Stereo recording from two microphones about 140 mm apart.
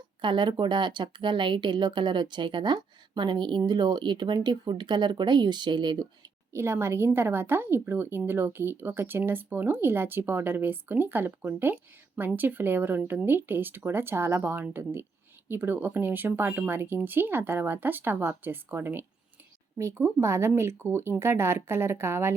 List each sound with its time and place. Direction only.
0.2 s a woman's voice: 35° right (ahead or behind); by 22.3 s 20° right (ahead or behind)